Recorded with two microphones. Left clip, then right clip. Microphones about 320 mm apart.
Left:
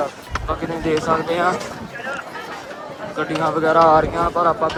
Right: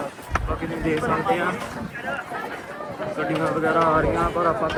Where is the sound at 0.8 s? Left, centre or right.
Centre.